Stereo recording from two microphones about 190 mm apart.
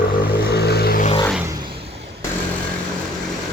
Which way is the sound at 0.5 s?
60° left (ahead or behind).